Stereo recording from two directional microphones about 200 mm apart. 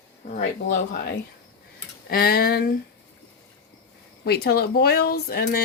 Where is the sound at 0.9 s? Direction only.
55° left (ahead or behind).